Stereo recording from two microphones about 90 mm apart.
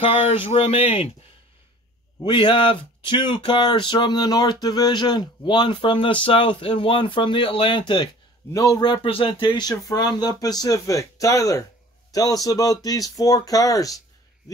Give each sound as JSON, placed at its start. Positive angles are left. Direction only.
{"t": 0.4, "sound": "speech", "side_deg": 90}
{"t": 2.2, "sound": "speech", "side_deg": 60}
{"t": 8.5, "sound": "speech", "side_deg": 45}
{"t": 8.8, "sound": "speech", "side_deg": 65}